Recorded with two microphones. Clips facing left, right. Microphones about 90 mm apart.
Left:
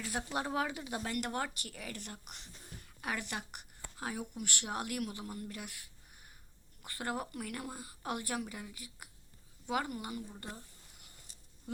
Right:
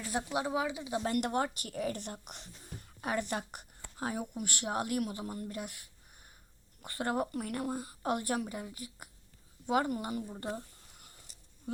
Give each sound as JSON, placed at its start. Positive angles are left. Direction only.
{"t": 0.0, "sound": "a sound", "side_deg": -25}
{"t": 0.3, "sound": "speech", "side_deg": -10}
{"t": 1.0, "sound": "speech", "side_deg": -40}
{"t": 1.3, "sound": "speech", "side_deg": -30}
{"t": 6.8, "sound": "speech", "side_deg": -35}
{"t": 10.3, "sound": "speech", "side_deg": -25}